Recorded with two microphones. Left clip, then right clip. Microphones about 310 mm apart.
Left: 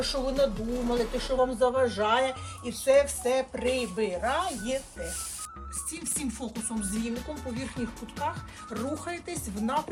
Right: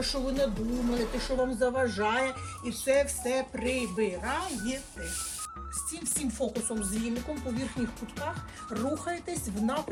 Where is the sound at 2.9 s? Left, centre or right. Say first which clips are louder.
Left 5 dB; centre.